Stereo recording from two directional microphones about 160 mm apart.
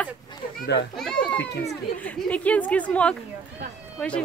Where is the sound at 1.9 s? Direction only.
10° left (ahead or behind).